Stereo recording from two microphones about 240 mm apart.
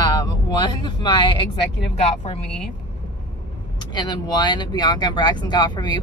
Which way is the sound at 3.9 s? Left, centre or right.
Centre.